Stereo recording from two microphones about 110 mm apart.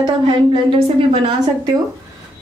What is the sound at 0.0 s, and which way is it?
Speech, 50° right (ahead or behind).